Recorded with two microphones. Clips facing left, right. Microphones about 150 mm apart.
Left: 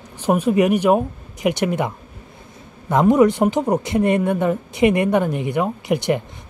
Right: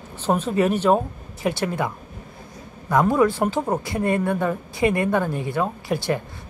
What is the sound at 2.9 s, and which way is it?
Speech, 20° left (ahead or behind).